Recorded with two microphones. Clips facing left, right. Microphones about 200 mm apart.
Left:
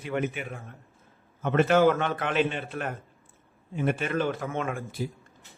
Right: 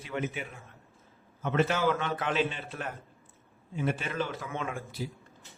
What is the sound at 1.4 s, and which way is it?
A man's voice, 55° left (ahead or behind).